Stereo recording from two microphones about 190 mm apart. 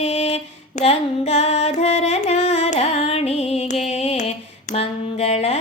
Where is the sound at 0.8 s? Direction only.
35° left (ahead or behind).